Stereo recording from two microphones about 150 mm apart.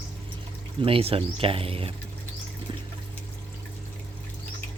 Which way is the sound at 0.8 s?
40° right (ahead or behind).